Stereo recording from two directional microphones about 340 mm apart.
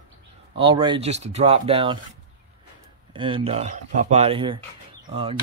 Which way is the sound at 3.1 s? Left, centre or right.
Centre.